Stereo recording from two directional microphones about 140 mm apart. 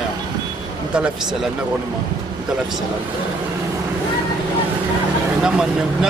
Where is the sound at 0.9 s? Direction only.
10° right (ahead or behind).